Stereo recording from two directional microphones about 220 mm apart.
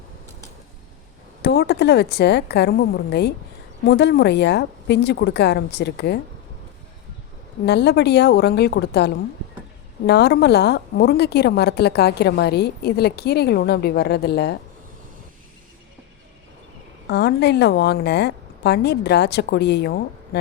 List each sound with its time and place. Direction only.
1.4 s a woman's voice: 50° left (ahead or behind)
7.6 s a woman's voice: 50° left (ahead or behind)
17.1 s a woman's voice: 50° left (ahead or behind)